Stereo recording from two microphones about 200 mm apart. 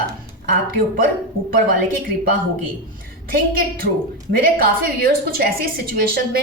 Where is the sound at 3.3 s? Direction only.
50° right (ahead or behind).